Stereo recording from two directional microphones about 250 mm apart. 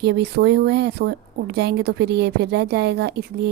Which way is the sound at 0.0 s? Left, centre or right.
Right.